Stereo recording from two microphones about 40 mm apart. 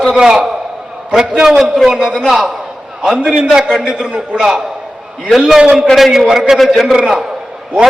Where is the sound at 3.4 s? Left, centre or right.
Centre.